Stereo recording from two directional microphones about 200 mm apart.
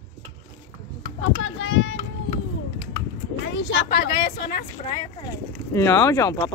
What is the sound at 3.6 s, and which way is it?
Speech, 60° left (ahead or behind).